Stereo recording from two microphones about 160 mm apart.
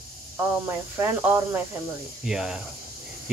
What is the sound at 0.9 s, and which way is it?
Speech, 15° right (ahead or behind).